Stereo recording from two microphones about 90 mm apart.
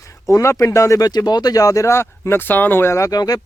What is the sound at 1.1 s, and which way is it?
Speech, 50° left (ahead or behind).